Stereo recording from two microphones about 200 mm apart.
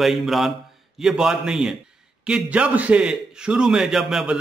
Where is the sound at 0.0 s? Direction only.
Centre (ahead or behind).